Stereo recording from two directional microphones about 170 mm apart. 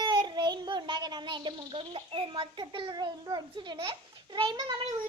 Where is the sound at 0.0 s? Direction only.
25° right (ahead or behind).